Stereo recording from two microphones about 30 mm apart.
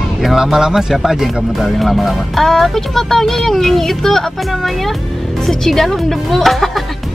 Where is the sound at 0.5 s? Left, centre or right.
Centre.